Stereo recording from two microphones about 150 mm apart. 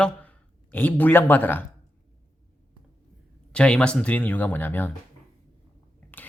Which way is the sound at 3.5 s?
5° left (ahead or behind).